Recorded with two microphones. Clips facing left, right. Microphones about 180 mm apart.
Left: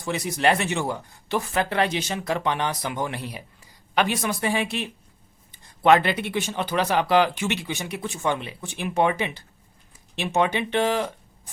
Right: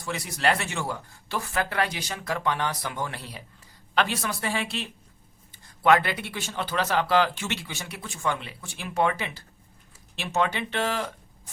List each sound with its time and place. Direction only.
0.0 s speech: 20° left (ahead or behind)